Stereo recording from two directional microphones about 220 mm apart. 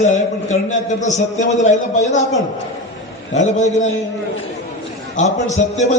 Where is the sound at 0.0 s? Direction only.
35° left (ahead or behind).